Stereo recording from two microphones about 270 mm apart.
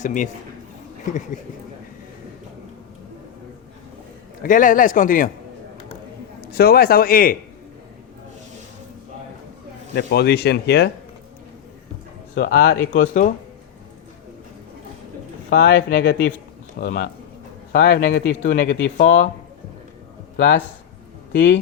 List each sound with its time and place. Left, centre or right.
0.0 s speech: left
4.4 s speech: left
6.5 s speech: left
9.9 s speech: left
12.3 s speech: left
15.4 s speech: left
20.3 s speech: left